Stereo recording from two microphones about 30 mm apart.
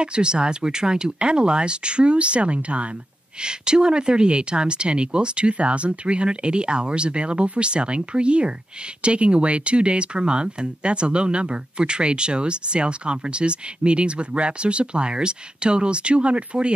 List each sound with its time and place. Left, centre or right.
0.0 s speech: right
3.4 s speech: right